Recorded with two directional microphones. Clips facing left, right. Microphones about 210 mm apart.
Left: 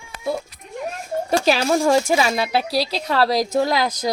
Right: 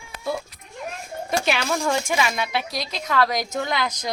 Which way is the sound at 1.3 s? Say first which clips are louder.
Left 5 dB; 35° left (ahead or behind).